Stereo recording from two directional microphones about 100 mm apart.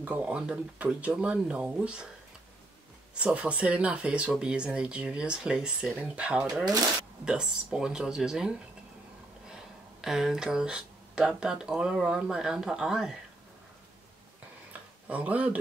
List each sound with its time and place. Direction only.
0.0 s speech: 15° right (ahead or behind)
3.2 s speech: 10° right (ahead or behind)
10.0 s speech: 5° right (ahead or behind)
14.7 s a sound: 15° right (ahead or behind)